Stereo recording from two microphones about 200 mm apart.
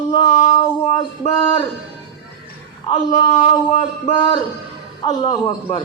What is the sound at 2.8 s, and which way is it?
A man's voice, 20° left (ahead or behind).